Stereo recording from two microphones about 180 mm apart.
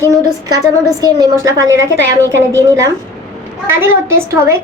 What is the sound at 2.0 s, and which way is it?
Speech, 10° left (ahead or behind).